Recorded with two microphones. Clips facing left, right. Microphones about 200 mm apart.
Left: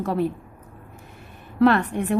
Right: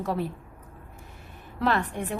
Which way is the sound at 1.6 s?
65° left (ahead or behind).